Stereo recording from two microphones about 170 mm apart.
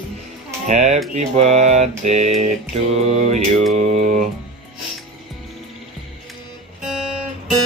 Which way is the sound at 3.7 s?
45° right (ahead or behind).